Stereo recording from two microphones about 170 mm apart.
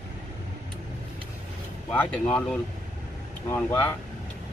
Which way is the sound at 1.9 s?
5° left (ahead or behind).